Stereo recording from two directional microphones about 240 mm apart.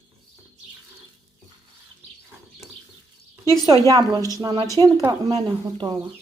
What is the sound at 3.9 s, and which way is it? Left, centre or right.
Speech, centre.